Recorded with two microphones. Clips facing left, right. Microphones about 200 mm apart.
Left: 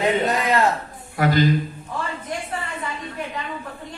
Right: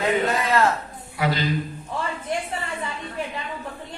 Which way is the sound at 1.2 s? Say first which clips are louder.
Left 5 dB; 45° left (ahead or behind).